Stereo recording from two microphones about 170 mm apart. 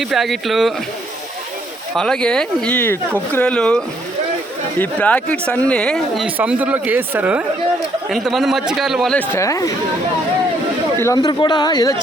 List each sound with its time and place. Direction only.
0.0 s speech: centre (ahead or behind)
2.0 s speech: 5° left (ahead or behind)
6.2 s speech: 10° right (ahead or behind)
9.3 s a man's voice: 20° left (ahead or behind)
11.0 s a man's voice: 20° left (ahead or behind)